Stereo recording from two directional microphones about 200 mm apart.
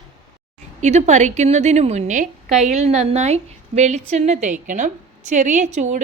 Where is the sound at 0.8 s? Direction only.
35° right (ahead or behind).